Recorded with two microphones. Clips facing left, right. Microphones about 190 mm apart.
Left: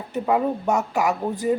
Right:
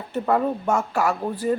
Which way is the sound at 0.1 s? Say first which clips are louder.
Even; 10° left (ahead or behind).